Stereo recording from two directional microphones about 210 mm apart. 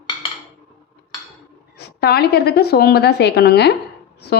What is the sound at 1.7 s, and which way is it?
A woman's voice, 50° left (ahead or behind).